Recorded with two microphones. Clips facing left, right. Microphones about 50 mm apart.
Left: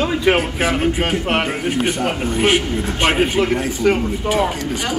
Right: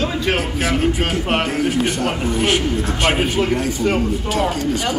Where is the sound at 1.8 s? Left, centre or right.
Centre.